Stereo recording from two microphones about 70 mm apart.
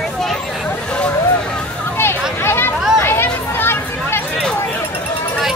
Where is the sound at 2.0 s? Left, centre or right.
Left.